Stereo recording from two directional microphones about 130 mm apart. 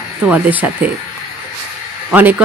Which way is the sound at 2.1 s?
15° right (ahead or behind).